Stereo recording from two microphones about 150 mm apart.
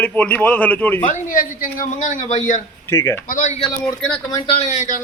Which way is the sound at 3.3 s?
60° left (ahead or behind).